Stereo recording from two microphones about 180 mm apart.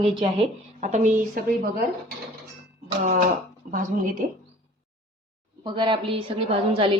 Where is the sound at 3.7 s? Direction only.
50° right (ahead or behind).